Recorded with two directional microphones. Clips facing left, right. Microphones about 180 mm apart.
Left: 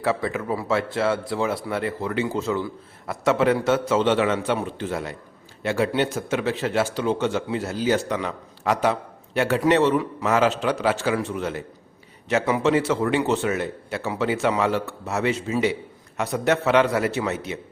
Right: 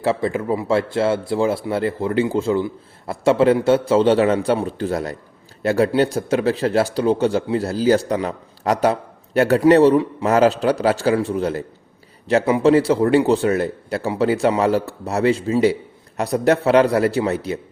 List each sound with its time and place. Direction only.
0.0 s a man's voice: 25° right (ahead or behind)